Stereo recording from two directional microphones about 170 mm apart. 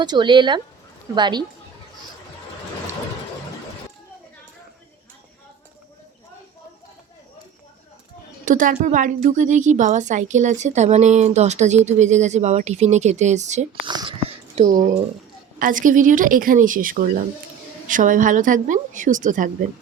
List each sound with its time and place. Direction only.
0.0 s speech: 25° right (ahead or behind)
8.4 s a woman's voice: 50° right (ahead or behind)
13.8 s a sound: 25° right (ahead or behind); by 14.8 s 45° right (ahead or behind)
15.5 s a woman's voice: 55° right (ahead or behind)